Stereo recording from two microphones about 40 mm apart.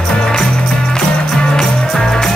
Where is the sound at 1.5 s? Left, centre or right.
Centre.